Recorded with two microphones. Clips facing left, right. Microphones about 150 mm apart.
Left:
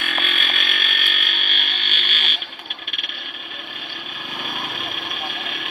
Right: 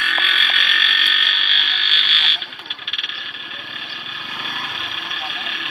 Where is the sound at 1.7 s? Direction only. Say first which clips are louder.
Right 1 dB; 50° left (ahead or behind).